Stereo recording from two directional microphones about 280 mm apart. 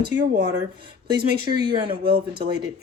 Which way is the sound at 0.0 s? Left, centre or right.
Right.